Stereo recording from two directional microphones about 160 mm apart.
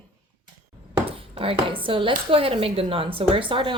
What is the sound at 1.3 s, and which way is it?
Speech, 35° right (ahead or behind).